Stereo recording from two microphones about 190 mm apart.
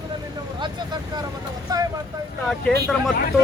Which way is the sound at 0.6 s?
25° right (ahead or behind).